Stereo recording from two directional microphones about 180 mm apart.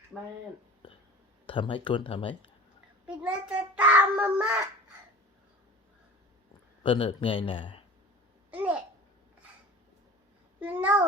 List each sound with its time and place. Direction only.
1.5 s speech: 25° left (ahead or behind)
3.1 s a child's voice: 5° right (ahead or behind)
6.8 s speech: 30° left (ahead or behind)
8.4 s babbling: 10° right (ahead or behind)
10.6 s a sound: 10° right (ahead or behind)